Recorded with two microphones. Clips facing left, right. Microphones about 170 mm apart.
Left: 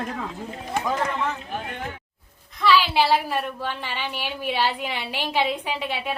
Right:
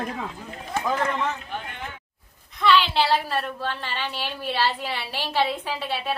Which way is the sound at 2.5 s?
5° left (ahead or behind).